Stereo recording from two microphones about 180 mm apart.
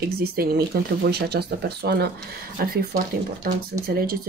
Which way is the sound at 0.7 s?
60° right (ahead or behind).